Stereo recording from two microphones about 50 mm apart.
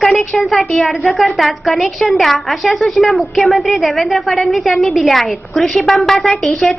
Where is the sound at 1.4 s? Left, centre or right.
Centre.